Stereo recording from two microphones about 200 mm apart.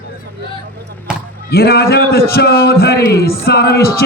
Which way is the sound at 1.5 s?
50° left (ahead or behind).